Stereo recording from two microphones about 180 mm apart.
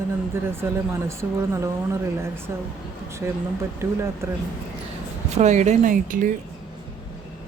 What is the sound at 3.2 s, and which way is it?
Speech, 15° right (ahead or behind).